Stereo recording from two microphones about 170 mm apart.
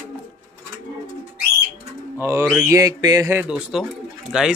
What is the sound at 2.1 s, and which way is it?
Speech, 15° right (ahead or behind).